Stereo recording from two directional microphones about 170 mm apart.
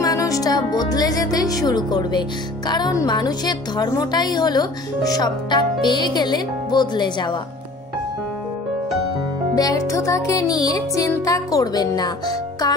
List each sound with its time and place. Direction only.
0.0 s speech: 20° left (ahead or behind)
9.6 s speech: 20° left (ahead or behind)